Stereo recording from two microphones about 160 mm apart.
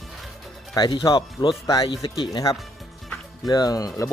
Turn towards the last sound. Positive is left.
turn(degrees=20)  # may be behind; listen again after turning